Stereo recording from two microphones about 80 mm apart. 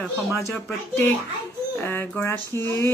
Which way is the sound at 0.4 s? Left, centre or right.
Left.